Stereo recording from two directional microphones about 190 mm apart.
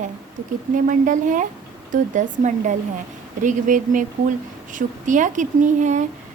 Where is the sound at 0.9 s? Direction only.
45° right (ahead or behind).